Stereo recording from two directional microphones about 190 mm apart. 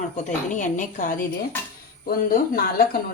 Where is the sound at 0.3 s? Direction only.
40° left (ahead or behind).